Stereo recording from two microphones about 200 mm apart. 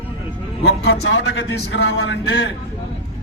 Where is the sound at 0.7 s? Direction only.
55° left (ahead or behind).